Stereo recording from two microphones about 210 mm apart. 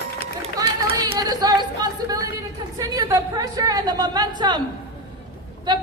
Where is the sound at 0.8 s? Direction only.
25° right (ahead or behind).